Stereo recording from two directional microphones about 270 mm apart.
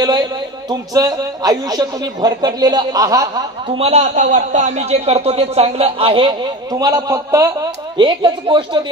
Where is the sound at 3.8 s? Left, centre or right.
Right.